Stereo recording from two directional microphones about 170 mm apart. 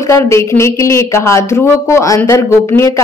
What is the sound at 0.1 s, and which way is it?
Speech, 15° left (ahead or behind).